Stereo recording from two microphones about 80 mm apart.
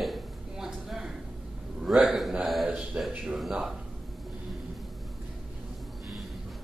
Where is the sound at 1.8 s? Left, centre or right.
Centre.